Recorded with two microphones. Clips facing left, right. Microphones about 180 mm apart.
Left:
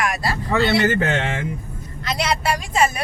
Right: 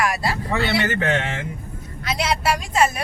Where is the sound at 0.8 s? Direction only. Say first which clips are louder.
Left 4 dB; 30° left (ahead or behind).